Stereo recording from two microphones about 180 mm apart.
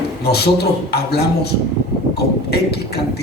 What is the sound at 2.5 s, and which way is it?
Speech, 65° left (ahead or behind).